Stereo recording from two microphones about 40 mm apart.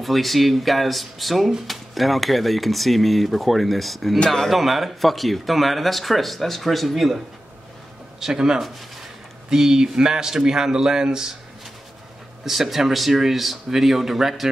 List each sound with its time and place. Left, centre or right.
0.0 s speech: centre
8.2 s a man's voice: centre
12.4 s speech: centre